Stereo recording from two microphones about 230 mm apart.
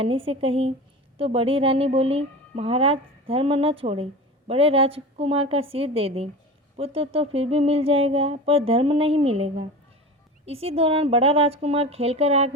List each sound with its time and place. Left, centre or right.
0.0 s a woman's voice: right